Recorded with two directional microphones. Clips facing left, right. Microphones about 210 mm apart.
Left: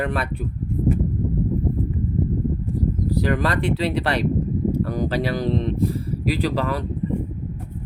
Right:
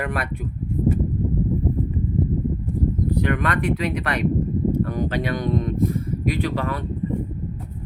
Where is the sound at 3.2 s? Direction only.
30° left (ahead or behind).